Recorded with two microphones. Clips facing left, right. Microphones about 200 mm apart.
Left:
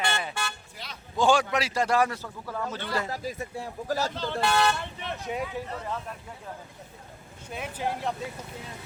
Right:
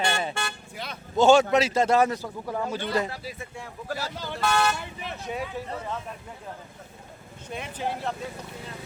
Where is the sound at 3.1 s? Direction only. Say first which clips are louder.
Left 4 dB; 40° left (ahead or behind).